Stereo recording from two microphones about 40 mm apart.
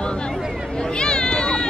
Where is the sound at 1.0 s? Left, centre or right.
Left.